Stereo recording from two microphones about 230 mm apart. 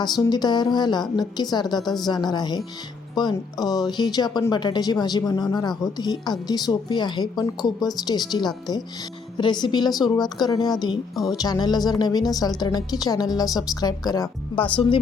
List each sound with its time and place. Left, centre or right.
0.0 s a woman's voice: centre